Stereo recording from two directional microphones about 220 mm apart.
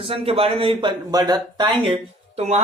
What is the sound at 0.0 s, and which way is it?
Speech, 25° right (ahead or behind).